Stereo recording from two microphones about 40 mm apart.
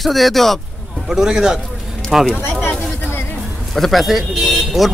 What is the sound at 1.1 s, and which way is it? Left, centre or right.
A man's voice, centre.